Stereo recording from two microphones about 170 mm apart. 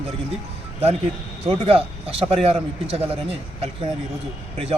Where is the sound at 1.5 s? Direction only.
35° right (ahead or behind).